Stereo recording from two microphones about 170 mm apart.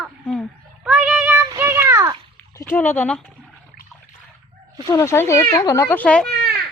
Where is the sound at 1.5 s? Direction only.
15° right (ahead or behind).